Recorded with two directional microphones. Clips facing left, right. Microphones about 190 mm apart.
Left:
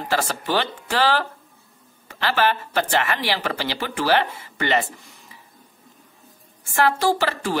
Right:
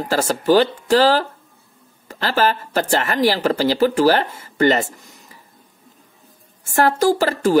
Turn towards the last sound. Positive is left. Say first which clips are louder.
# right 5 dB
turn(degrees=-40)  # may be behind; listen again after turning